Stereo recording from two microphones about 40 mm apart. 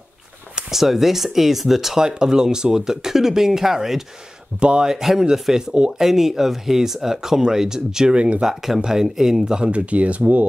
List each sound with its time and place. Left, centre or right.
0.7 s speech: centre
2.0 s speech: centre
4.6 s speech: right
4.8 s speech: centre
9.7 s speech: right